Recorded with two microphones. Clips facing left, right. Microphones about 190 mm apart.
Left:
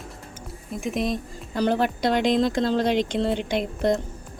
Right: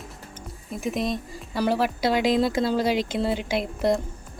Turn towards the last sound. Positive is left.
turn(degrees=-5)  # may be behind; listen again after turning